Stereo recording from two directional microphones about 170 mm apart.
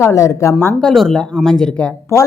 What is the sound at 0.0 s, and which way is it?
Speech, 20° left (ahead or behind).